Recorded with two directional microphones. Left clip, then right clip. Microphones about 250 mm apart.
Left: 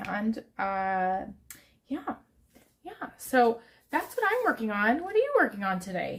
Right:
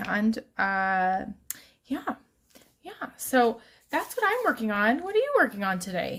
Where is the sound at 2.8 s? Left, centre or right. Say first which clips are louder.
Right 2 dB; right.